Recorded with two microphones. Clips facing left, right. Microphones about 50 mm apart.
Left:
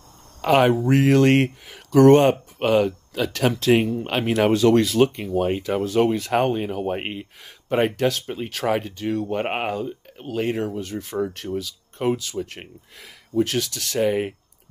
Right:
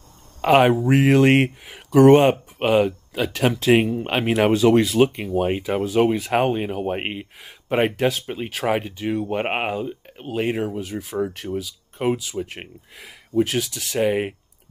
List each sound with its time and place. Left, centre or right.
0.4 s speech: centre